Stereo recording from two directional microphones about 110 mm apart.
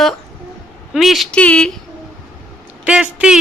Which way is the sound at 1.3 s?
10° left (ahead or behind).